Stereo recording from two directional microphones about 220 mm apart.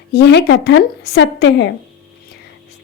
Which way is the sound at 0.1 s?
50° left (ahead or behind).